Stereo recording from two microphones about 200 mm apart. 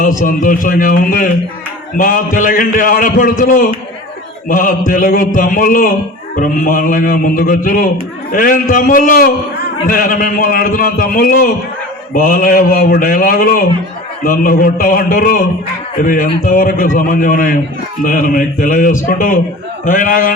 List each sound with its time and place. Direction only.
0.2 s a man's voice: 40° left (ahead or behind)